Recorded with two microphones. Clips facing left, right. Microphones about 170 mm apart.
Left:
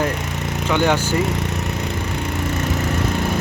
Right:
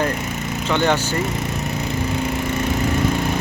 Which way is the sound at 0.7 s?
10° left (ahead or behind).